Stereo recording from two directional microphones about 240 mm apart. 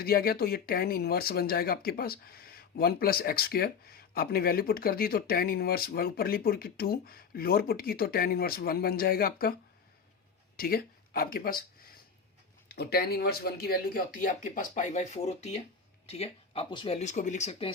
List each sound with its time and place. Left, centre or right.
0.0 s speech: left
10.6 s speech: left